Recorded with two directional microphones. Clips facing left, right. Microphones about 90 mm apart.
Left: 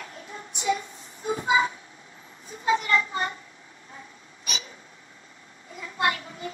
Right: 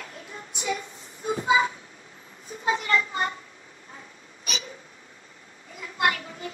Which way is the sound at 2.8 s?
30° left (ahead or behind).